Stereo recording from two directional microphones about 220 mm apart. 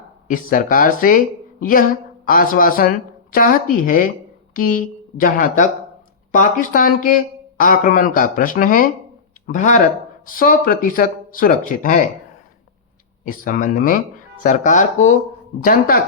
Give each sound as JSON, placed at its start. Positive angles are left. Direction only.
{"t": 0.3, "sound": "a woman's voice", "side_deg": 40}
{"t": 13.2, "sound": "a woman's voice", "side_deg": 40}